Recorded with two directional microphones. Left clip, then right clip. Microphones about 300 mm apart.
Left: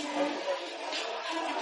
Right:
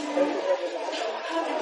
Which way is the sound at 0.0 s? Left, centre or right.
Centre.